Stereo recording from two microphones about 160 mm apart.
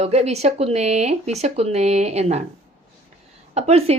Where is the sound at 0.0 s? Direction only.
40° right (ahead or behind).